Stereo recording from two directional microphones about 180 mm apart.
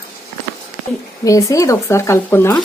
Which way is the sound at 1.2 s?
20° left (ahead or behind).